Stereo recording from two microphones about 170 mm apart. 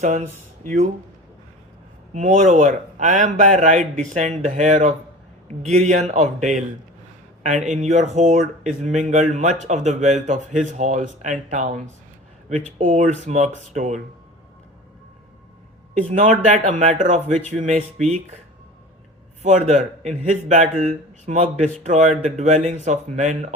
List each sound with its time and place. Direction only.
0.0 s speech: 45° right (ahead or behind)
2.1 s speech: 45° right (ahead or behind)
12.8 s a man's voice: 40° right (ahead or behind)
16.0 s a man's voice: 40° right (ahead or behind)
19.4 s a man's voice: 40° right (ahead or behind)